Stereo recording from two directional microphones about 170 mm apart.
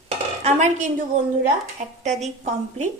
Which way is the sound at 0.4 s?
45° right (ahead or behind).